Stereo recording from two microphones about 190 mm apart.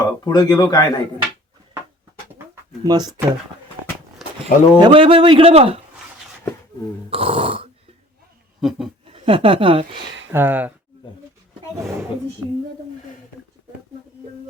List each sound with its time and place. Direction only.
0.0 s speech: 20° left (ahead or behind)
2.8 s speech: 20° right (ahead or behind)
4.4 s speech: 25° right (ahead or behind)
7.1 s speech: 30° right (ahead or behind)
9.1 s speech: 30° right (ahead or behind)
10.3 s speech: 10° right (ahead or behind)